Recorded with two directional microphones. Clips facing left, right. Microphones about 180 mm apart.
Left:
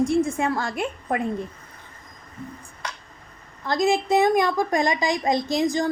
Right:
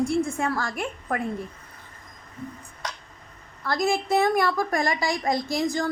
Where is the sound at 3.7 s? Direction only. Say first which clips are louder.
Left 3 dB; 20° left (ahead or behind).